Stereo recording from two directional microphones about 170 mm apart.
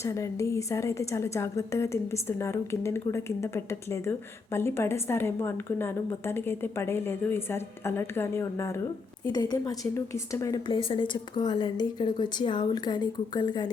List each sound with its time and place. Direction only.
0.0 s a woman's voice: 20° left (ahead or behind)